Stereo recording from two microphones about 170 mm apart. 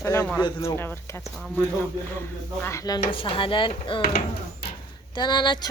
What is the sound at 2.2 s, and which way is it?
Speech, 15° left (ahead or behind).